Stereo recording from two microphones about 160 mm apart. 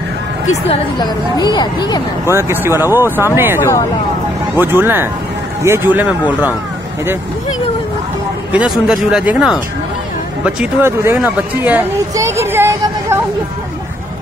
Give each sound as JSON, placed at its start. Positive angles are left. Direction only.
{"t": 1.4, "sound": "speech", "side_deg": 25}
{"t": 2.3, "sound": "speech", "side_deg": -15}
{"t": 8.5, "sound": "speech", "side_deg": -5}